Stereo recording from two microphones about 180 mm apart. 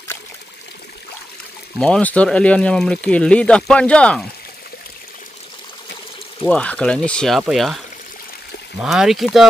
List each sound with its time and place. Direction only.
1.8 s speech: 5° left (ahead or behind)
6.5 s speech: 5° left (ahead or behind)
8.8 s speech: centre (ahead or behind)